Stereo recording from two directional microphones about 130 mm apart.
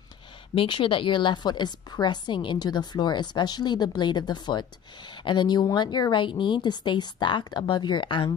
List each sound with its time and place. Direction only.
0.6 s a woman's voice: 40° left (ahead or behind)